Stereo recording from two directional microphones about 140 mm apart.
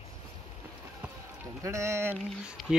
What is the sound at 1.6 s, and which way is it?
Speech, 20° right (ahead or behind).